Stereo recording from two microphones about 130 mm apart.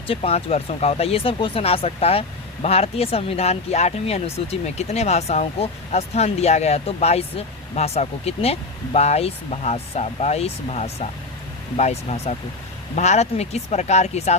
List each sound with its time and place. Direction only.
0.1 s speech: 50° left (ahead or behind)